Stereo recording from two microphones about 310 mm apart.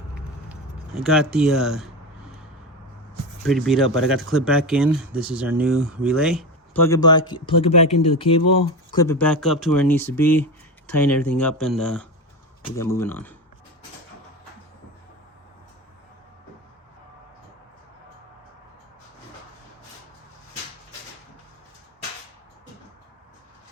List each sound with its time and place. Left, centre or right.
0.9 s speech: centre
3.4 s speech: centre